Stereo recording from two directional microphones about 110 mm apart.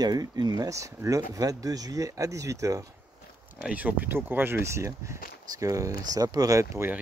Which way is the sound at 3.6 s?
15° right (ahead or behind).